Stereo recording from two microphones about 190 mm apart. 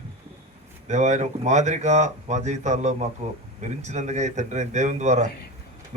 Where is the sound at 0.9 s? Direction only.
40° right (ahead or behind).